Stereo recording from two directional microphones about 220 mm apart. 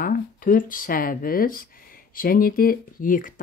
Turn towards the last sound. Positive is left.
turn(degrees=40)  # may be behind; listen again after turning